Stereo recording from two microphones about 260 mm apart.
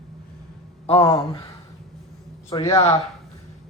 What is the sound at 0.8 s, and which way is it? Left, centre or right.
Speech, left.